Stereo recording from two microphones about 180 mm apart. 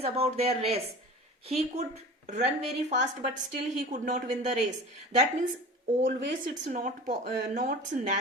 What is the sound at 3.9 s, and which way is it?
Speech, 45° right (ahead or behind).